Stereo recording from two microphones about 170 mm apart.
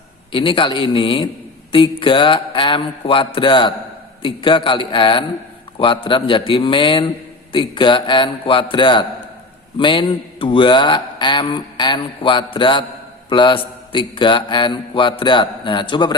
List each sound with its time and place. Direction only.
0.3 s mantra: 30° left (ahead or behind)